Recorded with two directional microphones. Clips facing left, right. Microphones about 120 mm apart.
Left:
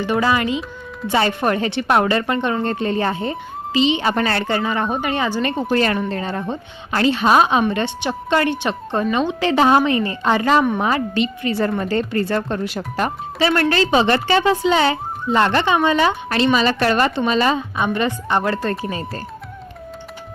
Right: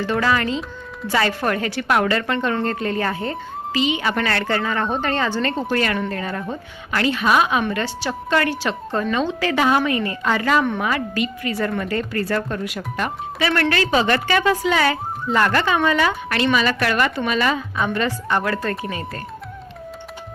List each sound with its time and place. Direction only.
0.0 s a woman's voice: 20° left (ahead or behind)